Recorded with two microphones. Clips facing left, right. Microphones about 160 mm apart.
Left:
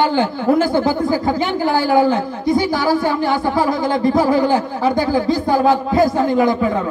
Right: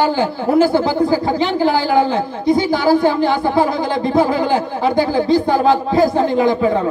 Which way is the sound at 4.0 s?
20° right (ahead or behind).